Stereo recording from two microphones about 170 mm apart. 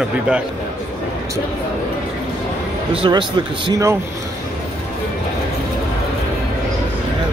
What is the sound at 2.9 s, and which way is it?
Speech, 30° right (ahead or behind).